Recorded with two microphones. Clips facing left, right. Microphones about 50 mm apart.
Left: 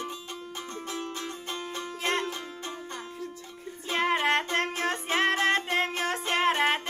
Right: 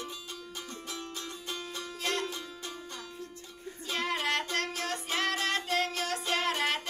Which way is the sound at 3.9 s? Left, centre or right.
Left.